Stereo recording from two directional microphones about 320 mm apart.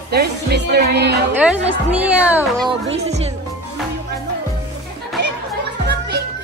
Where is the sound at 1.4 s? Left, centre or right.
Centre.